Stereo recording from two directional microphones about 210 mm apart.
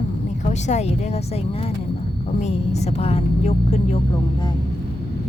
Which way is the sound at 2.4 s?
30° left (ahead or behind).